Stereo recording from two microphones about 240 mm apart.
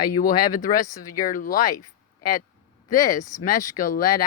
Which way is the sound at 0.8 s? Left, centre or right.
Centre.